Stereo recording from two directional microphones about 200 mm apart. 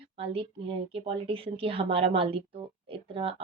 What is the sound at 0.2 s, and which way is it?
Speech, 30° right (ahead or behind).